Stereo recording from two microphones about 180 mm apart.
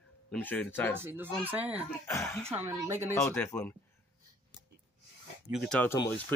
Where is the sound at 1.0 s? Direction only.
10° right (ahead or behind).